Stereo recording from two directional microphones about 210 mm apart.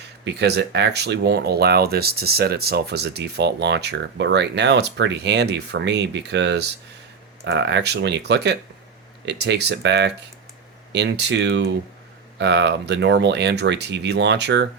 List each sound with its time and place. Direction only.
0.3 s speech: 55° right (ahead or behind)